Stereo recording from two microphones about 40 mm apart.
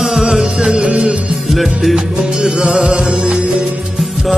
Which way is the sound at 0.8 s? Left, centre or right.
Centre.